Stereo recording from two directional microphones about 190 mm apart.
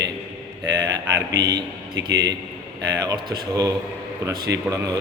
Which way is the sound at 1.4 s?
20° right (ahead or behind).